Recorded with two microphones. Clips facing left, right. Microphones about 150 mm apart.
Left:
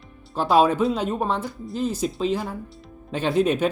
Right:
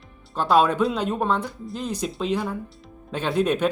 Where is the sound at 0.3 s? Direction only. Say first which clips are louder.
Left 1 dB; 5° left (ahead or behind).